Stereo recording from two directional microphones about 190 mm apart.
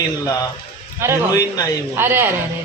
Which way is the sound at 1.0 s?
10° right (ahead or behind).